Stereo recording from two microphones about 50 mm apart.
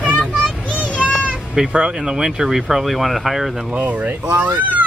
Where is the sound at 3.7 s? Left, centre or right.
Right.